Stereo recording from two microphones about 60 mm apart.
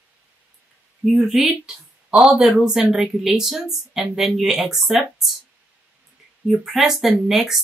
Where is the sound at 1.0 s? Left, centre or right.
Centre.